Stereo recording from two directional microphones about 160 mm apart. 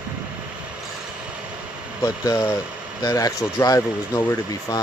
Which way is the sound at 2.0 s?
25° left (ahead or behind).